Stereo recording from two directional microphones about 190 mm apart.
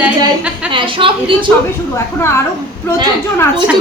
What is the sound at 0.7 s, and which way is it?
Speech, 25° right (ahead or behind).